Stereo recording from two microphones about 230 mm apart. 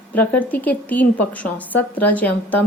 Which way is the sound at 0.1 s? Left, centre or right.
Centre.